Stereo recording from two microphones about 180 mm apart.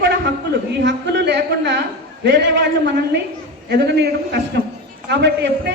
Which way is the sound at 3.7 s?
65° right (ahead or behind).